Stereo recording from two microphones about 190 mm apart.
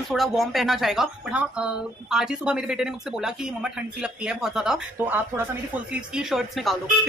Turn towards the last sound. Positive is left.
turn(degrees=0)  # may be behind; listen again after turning